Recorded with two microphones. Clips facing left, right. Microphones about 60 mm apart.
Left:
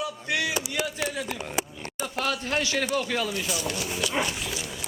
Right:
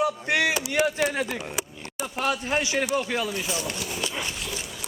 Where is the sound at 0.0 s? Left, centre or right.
Right.